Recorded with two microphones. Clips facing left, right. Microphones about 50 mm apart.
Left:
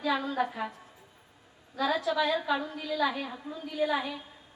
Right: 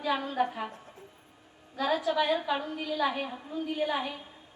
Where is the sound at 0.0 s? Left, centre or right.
Right.